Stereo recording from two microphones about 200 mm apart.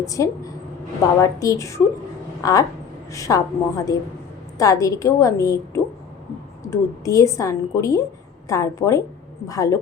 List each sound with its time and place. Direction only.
0.0 s a woman's voice: 15° left (ahead or behind)